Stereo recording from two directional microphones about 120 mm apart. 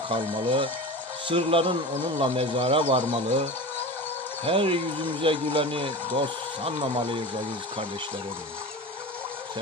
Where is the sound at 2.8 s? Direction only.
85° right.